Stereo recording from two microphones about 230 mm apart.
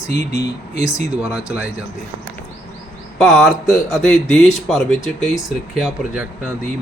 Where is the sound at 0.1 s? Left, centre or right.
Right.